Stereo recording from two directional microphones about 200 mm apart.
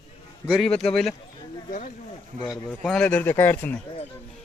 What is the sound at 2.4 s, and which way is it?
Speech, centre (ahead or behind).